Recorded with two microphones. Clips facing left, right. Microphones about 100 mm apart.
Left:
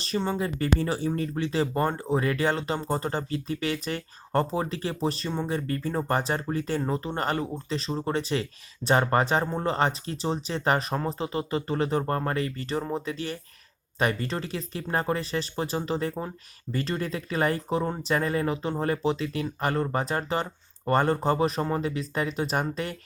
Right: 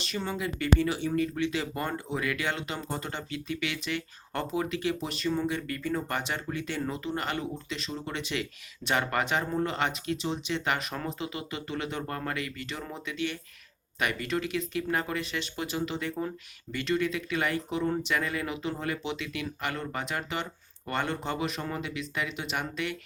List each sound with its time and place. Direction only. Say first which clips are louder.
0.0 s speech: left 5 dB; 30° left (ahead or behind)